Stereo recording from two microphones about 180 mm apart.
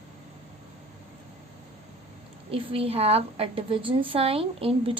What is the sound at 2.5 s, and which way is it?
A woman's voice, 30° right (ahead or behind).